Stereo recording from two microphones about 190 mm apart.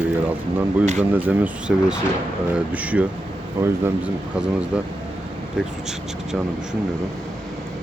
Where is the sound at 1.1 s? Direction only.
10° right (ahead or behind).